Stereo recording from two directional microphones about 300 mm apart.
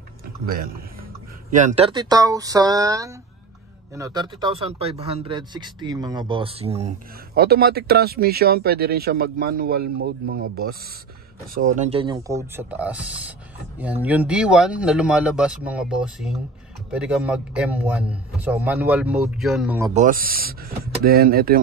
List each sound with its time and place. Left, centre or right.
0.5 s speech: right
7.3 s speech: right
11.7 s a man's voice: right; by 19.9 s centre
19.9 s speech: right